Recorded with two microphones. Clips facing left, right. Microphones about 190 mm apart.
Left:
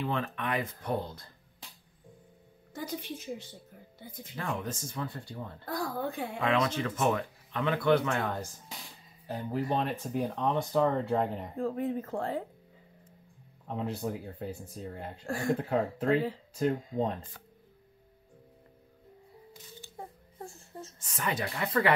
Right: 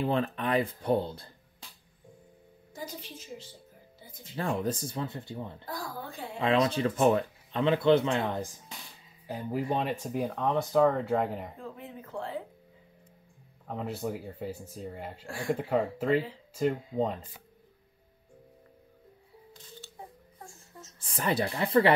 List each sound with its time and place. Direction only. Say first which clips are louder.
0.0 s speech: right 4 dB; 35° right (ahead or behind)
2.7 s a sound: left 3 dB; 60° left (ahead or behind)
4.4 s speech: right 5 dB; 35° right (ahead or behind)
5.7 s speech: left 10 dB; 60° left (ahead or behind)
6.4 s speech: right 3 dB; 30° right (ahead or behind); by 11.4 s 5° right (ahead or behind)
11.5 s speech: left 11 dB; 45° left (ahead or behind)
13.7 s speech: even; centre (ahead or behind)
15.2 s speech: left 2 dB; 40° left (ahead or behind)
16.5 s speech: right 2 dB; 5° right (ahead or behind)
19.8 s a sound: right 1 dB; 15° left (ahead or behind)
21.0 s speech: right 5 dB; 35° right (ahead or behind)